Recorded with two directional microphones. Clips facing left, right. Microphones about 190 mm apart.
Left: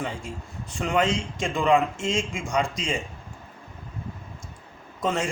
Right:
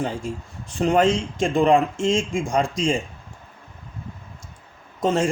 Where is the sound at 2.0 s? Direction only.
50° right (ahead or behind).